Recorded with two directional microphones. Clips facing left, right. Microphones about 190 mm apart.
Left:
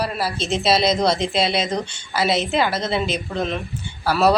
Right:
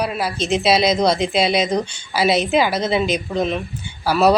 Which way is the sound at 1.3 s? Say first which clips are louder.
Right 3 dB; 25° left (ahead or behind).